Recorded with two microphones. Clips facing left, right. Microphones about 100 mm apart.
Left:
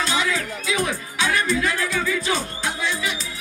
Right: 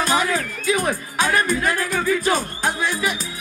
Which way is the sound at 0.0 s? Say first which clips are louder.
Right 3 dB; 45° right (ahead or behind).